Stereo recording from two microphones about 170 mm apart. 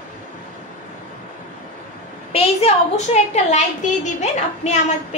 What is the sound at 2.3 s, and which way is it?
A woman's voice, 40° left (ahead or behind).